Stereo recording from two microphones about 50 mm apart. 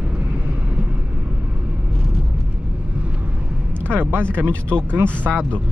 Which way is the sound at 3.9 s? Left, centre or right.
Right.